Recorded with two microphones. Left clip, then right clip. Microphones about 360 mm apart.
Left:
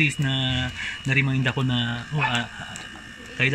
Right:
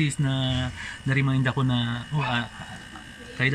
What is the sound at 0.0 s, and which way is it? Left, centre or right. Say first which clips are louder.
Speech: left 5 dB; centre.